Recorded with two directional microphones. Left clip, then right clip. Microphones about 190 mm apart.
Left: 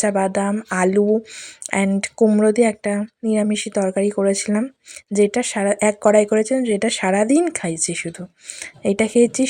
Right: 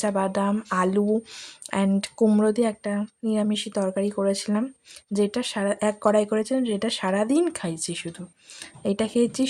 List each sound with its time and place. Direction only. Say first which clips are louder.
0.0 s speech: left 5 dB; 15° left (ahead or behind)